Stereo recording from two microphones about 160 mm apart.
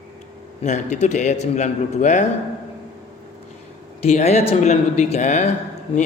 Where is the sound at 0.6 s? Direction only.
50° left (ahead or behind).